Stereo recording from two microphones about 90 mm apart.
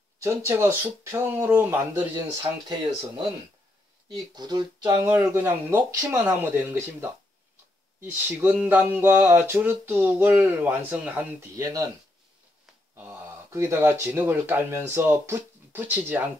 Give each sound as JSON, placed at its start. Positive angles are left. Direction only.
{"t": 0.2, "sound": "speech", "side_deg": -30}
{"t": 4.1, "sound": "speech", "side_deg": -50}
{"t": 4.8, "sound": "speech", "side_deg": -35}
{"t": 5.4, "sound": "speech", "side_deg": -25}
{"t": 11.3, "sound": "speech", "side_deg": -35}
{"t": 12.9, "sound": "speech", "side_deg": -30}